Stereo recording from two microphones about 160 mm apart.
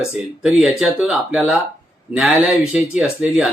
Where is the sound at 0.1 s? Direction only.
5° right (ahead or behind).